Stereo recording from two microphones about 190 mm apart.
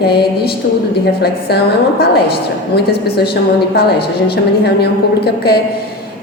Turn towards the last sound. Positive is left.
turn(degrees=55)  # may be behind; listen again after turning